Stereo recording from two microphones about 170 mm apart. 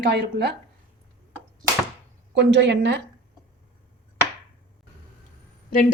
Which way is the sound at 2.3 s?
90° right.